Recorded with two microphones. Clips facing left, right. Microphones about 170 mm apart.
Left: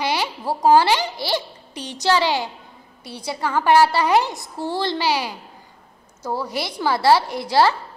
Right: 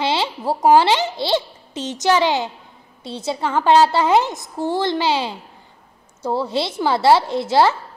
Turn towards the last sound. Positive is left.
turn(degrees=-20)  # may be behind; listen again after turning